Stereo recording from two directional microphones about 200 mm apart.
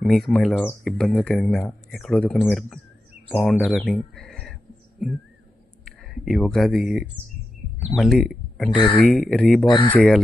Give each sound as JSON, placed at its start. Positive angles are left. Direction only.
{"t": 0.0, "sound": "speech", "side_deg": 0}
{"t": 5.9, "sound": "speech", "side_deg": 0}
{"t": 8.6, "sound": "speech", "side_deg": 25}
{"t": 8.9, "sound": "speech", "side_deg": 0}
{"t": 9.7, "sound": "speech", "side_deg": 25}
{"t": 9.9, "sound": "speech", "side_deg": 5}